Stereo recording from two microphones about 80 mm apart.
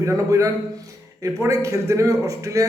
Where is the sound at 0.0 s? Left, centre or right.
Right.